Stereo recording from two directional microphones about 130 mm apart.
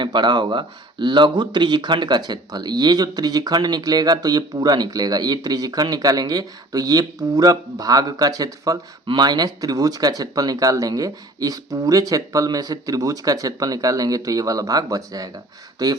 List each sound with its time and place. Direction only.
0.0 s speech: 35° right (ahead or behind)